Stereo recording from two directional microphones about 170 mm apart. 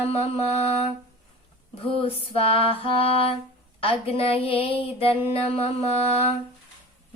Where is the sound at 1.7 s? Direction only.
35° left (ahead or behind).